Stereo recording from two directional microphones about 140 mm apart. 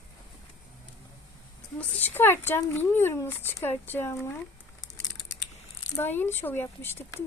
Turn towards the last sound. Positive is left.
turn(degrees=15)  # may be behind; listen again after turning